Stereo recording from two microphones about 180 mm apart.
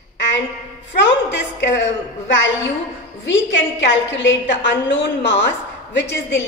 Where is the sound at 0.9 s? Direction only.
80° left.